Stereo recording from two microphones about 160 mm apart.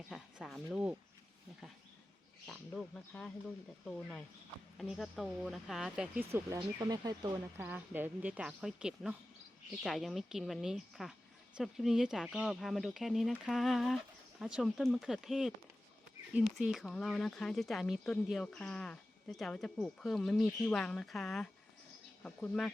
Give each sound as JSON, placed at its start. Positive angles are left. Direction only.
{"t": 0.1, "sound": "a sound", "side_deg": 0}
{"t": 2.5, "sound": "speech", "side_deg": 5}
{"t": 4.8, "sound": "speech", "side_deg": 0}
{"t": 6.6, "sound": "speech", "side_deg": -25}
{"t": 7.6, "sound": "speech", "side_deg": -10}